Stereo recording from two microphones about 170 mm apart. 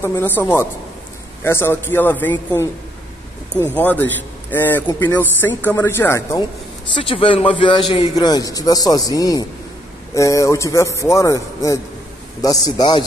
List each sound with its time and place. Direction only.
0.0 s a man's voice: 10° left (ahead or behind)
3.7 s a man's voice: 10° left (ahead or behind)
6.9 s a man's voice: 30° left (ahead or behind)